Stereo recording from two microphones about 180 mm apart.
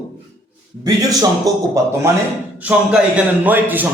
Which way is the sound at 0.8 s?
20° right (ahead or behind).